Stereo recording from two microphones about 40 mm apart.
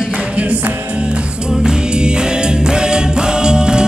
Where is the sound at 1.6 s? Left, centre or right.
Centre.